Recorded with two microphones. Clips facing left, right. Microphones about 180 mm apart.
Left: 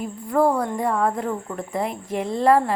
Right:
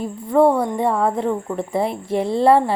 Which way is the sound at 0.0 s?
25° right (ahead or behind).